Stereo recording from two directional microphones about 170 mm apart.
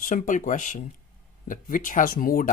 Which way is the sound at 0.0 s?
50° left (ahead or behind).